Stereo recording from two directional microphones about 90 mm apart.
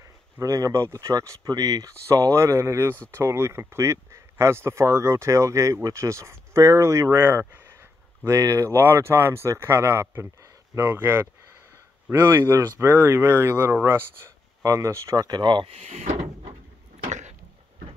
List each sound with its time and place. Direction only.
0.0 s speech: 40° right (ahead or behind)
8.4 s speech: 35° right (ahead or behind)
15.2 s speech: 55° right (ahead or behind)